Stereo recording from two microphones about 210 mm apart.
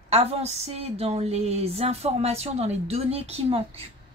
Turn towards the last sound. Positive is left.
turn(degrees=-30)  # may be behind; listen again after turning